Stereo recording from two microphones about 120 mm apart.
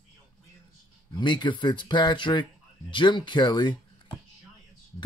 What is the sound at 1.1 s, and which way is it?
Speech, 40° left (ahead or behind).